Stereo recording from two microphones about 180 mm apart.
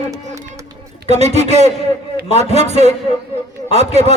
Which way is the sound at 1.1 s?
40° right (ahead or behind).